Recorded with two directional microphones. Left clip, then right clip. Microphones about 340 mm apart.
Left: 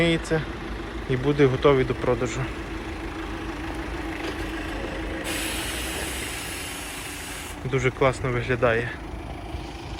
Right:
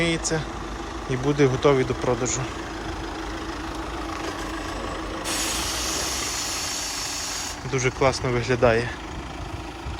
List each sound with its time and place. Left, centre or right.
0.0 s speech: centre
5.2 s vehicle: right
7.7 s speech: centre